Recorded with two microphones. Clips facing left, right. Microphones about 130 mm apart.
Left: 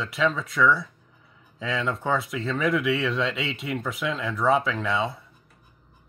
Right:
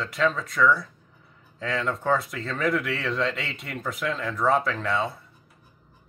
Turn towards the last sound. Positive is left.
turn(degrees=0)  # may be behind; listen again after turning